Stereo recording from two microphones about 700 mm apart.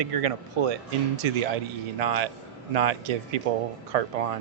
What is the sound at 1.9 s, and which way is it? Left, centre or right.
A man's voice, right.